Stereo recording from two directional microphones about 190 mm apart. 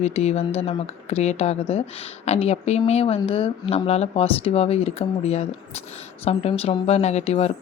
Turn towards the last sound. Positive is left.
turn(degrees=35)  # may be behind; listen again after turning